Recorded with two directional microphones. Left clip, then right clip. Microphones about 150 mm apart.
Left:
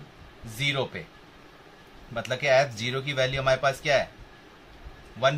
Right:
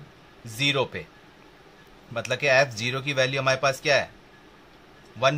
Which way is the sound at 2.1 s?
50° right (ahead or behind).